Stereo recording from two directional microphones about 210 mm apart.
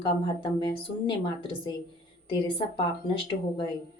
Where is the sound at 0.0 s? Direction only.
25° left (ahead or behind).